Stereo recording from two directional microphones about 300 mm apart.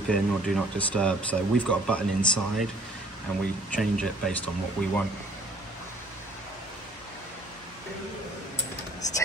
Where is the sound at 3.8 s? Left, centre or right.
Centre.